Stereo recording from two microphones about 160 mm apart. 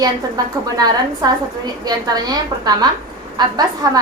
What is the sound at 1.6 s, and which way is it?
A woman's voice, 25° right (ahead or behind).